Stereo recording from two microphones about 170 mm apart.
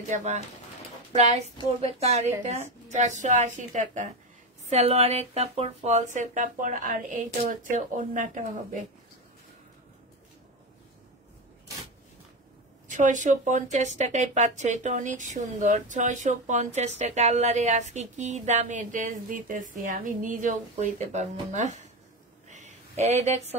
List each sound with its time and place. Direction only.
0.0 s a woman's voice: 45° right (ahead or behind)
12.8 s a woman's voice: 50° right (ahead or behind)
22.5 s a sound: 45° right (ahead or behind)